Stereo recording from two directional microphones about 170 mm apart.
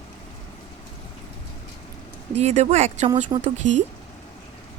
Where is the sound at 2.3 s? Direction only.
40° right (ahead or behind).